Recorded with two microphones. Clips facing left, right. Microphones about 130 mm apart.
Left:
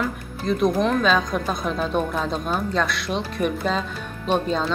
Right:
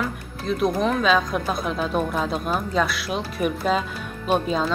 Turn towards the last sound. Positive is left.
turn(degrees=-5)  # may be behind; listen again after turning